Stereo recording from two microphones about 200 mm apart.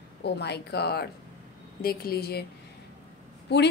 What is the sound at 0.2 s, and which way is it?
A woman's voice, 55° left (ahead or behind).